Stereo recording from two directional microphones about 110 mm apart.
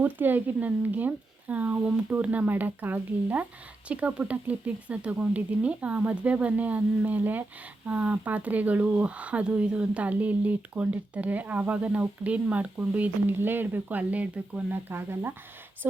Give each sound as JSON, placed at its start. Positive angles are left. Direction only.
{"t": 0.0, "sound": "speech", "side_deg": -15}